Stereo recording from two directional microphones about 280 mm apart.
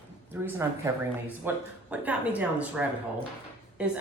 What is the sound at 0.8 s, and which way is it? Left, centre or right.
A woman's voice, centre.